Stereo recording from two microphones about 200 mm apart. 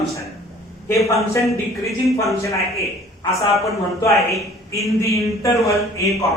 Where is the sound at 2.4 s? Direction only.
15° left (ahead or behind).